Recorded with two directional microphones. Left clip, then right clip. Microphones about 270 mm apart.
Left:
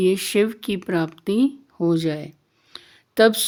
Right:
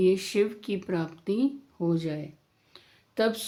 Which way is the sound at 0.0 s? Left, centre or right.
Left.